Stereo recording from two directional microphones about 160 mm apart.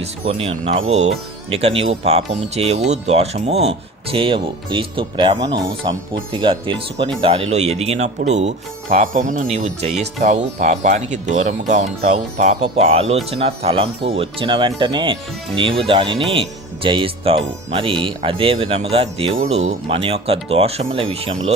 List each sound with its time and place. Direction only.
0.0 s speech: 40° right (ahead or behind)